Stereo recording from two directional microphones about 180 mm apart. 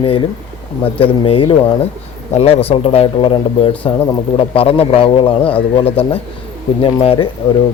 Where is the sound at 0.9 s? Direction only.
30° left (ahead or behind).